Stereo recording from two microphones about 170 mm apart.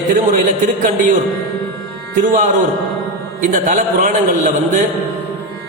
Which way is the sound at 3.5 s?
50° right (ahead or behind).